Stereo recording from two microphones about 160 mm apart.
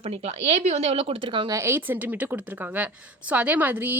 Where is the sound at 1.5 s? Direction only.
15° right (ahead or behind).